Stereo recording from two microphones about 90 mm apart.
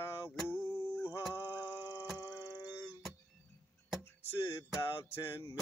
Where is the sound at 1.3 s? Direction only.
30° left (ahead or behind).